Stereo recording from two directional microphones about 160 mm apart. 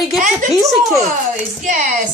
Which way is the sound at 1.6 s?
50° right (ahead or behind).